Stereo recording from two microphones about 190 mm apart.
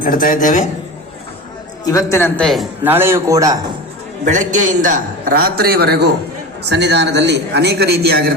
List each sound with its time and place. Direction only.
0.0 s a man's voice: 45° left (ahead or behind)
1.8 s a man's voice: 15° left (ahead or behind)
2.8 s a man's voice: 10° right (ahead or behind)
4.3 s a man's voice: 40° right (ahead or behind)